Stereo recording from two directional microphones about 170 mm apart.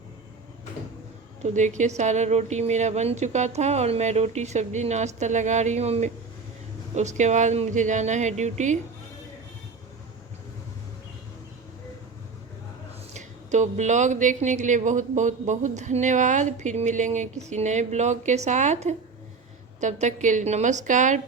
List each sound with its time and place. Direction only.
1.4 s speech: 45° right (ahead or behind)
13.1 s speech: 45° right (ahead or behind)